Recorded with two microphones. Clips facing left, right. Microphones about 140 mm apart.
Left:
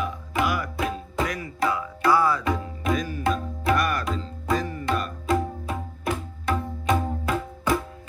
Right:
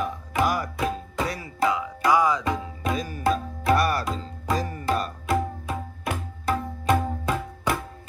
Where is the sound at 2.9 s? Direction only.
35° right (ahead or behind).